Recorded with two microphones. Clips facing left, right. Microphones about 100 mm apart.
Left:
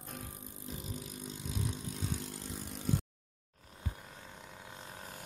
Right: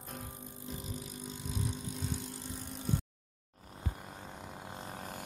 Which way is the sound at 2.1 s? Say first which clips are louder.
Even; 90° left.